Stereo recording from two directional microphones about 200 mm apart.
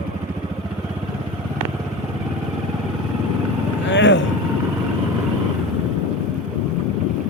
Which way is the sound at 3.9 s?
70° left (ahead or behind).